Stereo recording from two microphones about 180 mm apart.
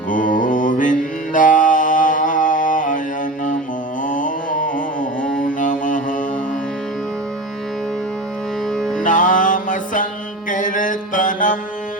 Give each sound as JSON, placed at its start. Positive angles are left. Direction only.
{"t": 0.1, "sound": "mantra", "side_deg": 45}
{"t": 4.0, "sound": "a sound", "side_deg": 45}
{"t": 5.4, "sound": "music", "side_deg": 45}
{"t": 8.7, "sound": "music", "side_deg": 5}
{"t": 9.0, "sound": "music", "side_deg": 45}
{"t": 10.5, "sound": "mantra", "side_deg": 45}